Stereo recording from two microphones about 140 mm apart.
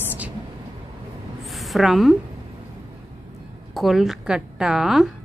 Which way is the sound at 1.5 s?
Centre (ahead or behind).